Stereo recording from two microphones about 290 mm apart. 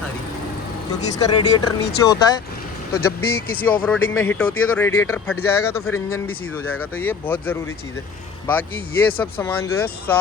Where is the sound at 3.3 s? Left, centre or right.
Left.